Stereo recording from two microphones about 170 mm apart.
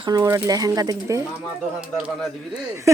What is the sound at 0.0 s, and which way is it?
Speech, 20° right (ahead or behind).